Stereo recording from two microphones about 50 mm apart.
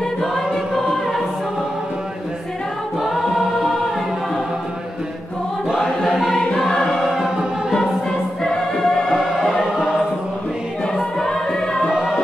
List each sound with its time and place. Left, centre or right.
0.7 s choir: centre
3.0 s choir: centre
5.8 s choir: centre
7.1 s choir: centre
8.5 s music: centre
9.2 s music: centre
11.2 s music: centre